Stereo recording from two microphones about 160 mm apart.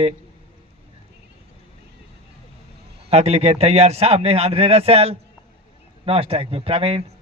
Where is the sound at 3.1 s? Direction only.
40° right (ahead or behind).